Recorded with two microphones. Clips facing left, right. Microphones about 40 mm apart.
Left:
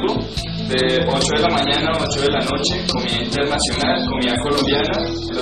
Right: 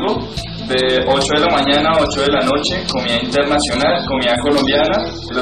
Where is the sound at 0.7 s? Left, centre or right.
Right.